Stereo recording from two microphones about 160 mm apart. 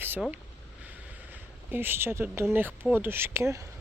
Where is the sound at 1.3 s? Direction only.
10° right (ahead or behind).